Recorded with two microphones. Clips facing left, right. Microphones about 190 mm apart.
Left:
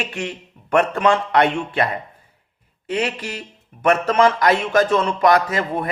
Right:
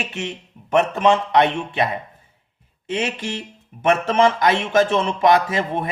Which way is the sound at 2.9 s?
25° right (ahead or behind).